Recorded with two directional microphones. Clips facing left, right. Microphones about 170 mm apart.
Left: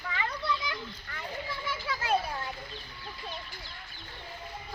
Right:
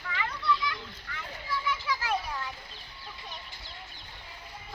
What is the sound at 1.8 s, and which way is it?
Children playing, 30° left (ahead or behind).